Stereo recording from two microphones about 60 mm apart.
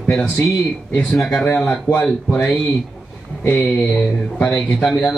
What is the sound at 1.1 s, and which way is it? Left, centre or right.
Speech, centre.